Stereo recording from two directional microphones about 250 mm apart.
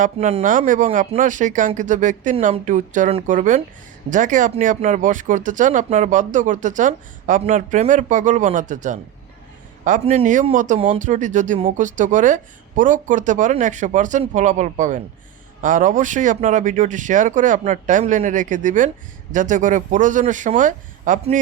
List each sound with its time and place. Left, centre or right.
0.0 s speech: right